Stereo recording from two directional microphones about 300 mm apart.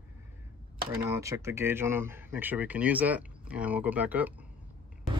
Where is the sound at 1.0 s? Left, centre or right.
Centre.